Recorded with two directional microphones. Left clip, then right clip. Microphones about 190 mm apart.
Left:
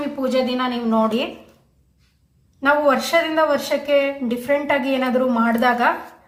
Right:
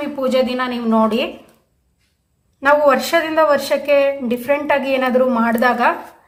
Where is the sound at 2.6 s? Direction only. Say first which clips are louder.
Right 4 dB; 25° right (ahead or behind).